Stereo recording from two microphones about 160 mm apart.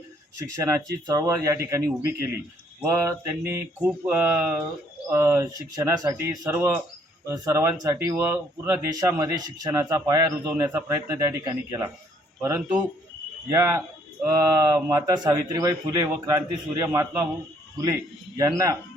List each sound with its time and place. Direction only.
0.3 s speech: 20° right (ahead or behind)
18.3 s speech: 20° right (ahead or behind)